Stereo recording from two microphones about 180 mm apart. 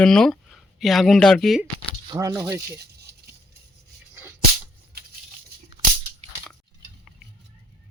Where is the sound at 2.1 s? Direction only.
20° right (ahead or behind).